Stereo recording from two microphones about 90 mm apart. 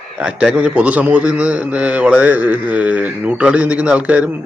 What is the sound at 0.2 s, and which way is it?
A man's voice, 10° right (ahead or behind).